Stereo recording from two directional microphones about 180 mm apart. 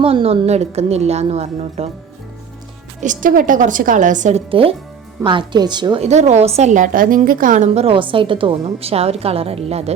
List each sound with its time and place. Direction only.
0.0 s a woman's voice: 35° right (ahead or behind)
3.0 s a woman's voice: 45° right (ahead or behind); by 6.0 s 25° right (ahead or behind)
6.0 s a woman's voice: 40° right (ahead or behind)